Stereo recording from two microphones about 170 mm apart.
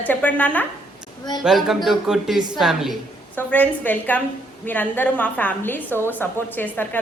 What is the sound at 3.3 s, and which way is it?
A woman's voice, 10° left (ahead or behind).